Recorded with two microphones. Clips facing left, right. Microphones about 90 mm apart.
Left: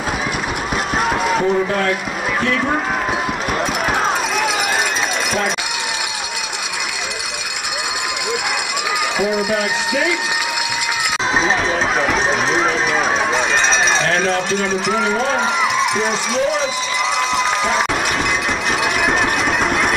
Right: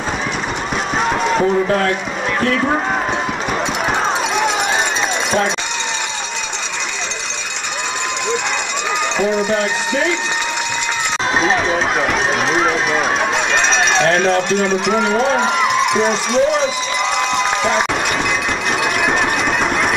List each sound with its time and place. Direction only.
0.9 s a sound: 5° left (ahead or behind)
1.4 s speech: 20° right (ahead or behind)
2.5 s speech: 5° right (ahead or behind)
9.2 s a man's voice: 5° left (ahead or behind)
11.3 s speech: centre (ahead or behind)
14.1 s speech: centre (ahead or behind)
17.4 s run: centre (ahead or behind)
19.6 s engine: centre (ahead or behind)